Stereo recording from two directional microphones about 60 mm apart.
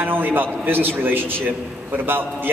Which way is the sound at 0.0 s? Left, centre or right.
Right.